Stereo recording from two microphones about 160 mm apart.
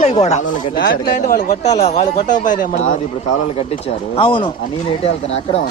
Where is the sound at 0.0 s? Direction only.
45° left (ahead or behind).